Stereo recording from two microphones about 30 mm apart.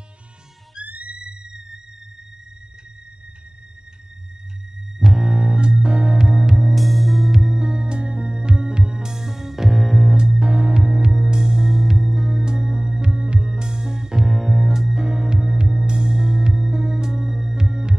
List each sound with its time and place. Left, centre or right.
0.8 s music: right
1.1 s theremin: right
4.9 s music: right
6.5 s music: centre
7.2 s music: centre
10.0 s music: right; by 12.4 s centre
12.4 s music: right
14.2 s music: centre
14.7 s music: centre